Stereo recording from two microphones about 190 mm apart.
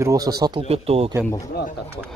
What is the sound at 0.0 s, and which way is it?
Speech, 20° right (ahead or behind).